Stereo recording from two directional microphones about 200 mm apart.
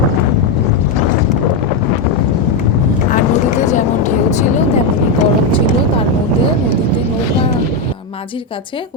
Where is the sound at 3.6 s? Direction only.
35° left (ahead or behind).